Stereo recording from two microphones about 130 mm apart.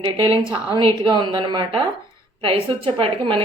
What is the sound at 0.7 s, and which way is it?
A woman's voice, 40° right (ahead or behind).